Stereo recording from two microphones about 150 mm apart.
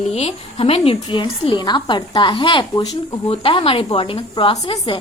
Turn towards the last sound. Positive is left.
turn(degrees=35)  # may be behind; listen again after turning